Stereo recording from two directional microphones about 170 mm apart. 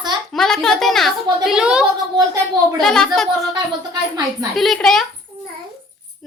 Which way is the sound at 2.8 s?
5° left (ahead or behind).